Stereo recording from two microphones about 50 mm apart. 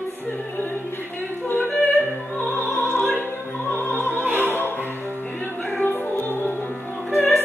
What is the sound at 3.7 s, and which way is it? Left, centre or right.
Music, left.